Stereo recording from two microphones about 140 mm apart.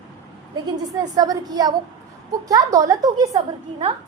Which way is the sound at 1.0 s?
30° right (ahead or behind).